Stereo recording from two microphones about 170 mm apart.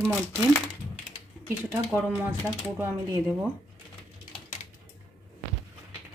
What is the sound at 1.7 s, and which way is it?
A woman's voice, 5° right (ahead or behind).